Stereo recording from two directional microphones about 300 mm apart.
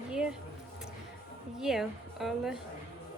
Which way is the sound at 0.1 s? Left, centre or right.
Centre.